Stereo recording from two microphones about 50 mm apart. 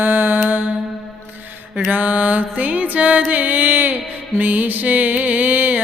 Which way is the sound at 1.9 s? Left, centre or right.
Right.